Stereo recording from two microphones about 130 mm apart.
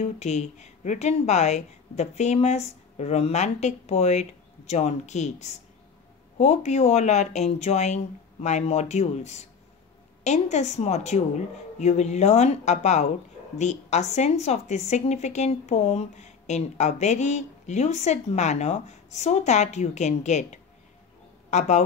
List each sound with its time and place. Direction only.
0.0 s speech: 60° left (ahead or behind)
21.5 s speech: 60° left (ahead or behind)